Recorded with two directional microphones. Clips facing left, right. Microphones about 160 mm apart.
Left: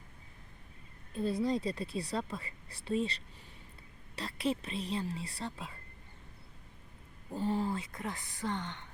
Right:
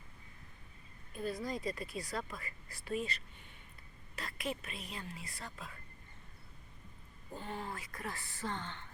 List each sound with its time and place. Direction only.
1.1 s speech: 30° left (ahead or behind)
7.3 s speech: 35° left (ahead or behind); by 8.9 s 15° left (ahead or behind)